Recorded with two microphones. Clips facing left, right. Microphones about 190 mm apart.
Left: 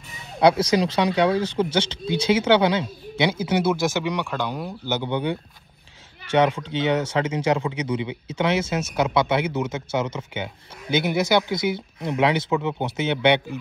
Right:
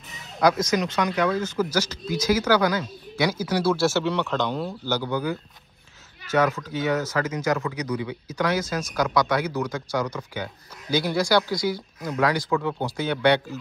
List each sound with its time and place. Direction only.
0.4 s speech: 30° left (ahead or behind); by 4.9 s 10° left (ahead or behind)
4.9 s speech: 25° left (ahead or behind)